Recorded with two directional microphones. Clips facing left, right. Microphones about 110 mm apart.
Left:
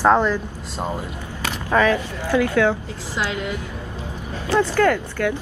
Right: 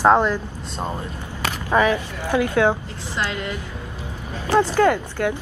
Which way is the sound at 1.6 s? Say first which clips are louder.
Left 1 dB; 15° right (ahead or behind).